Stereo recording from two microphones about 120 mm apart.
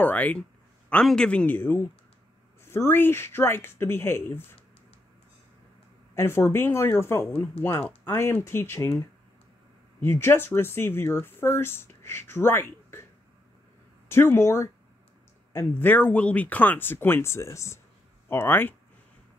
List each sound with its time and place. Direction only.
0.0 s speech: 15° left (ahead or behind)
6.1 s speech: 20° left (ahead or behind)
14.0 s speech: 20° left (ahead or behind)